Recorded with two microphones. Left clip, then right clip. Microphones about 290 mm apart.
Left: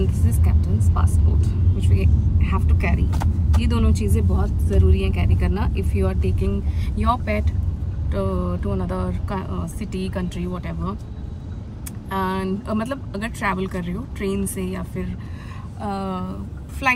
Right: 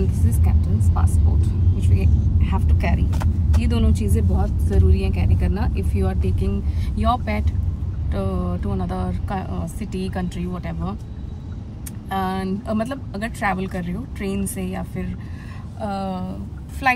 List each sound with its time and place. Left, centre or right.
0.0 s vehicle: centre
1.8 s speech: centre
12.1 s speech: centre